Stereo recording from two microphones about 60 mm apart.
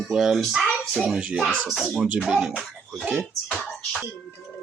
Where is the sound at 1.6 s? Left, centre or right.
Centre.